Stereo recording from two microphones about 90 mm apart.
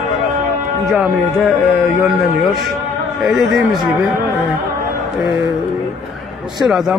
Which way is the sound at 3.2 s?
Centre (ahead or behind).